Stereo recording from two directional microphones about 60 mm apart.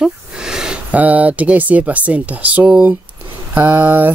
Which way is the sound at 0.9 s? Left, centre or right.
Right.